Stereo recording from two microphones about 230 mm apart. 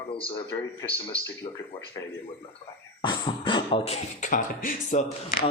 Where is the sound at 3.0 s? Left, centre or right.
Centre.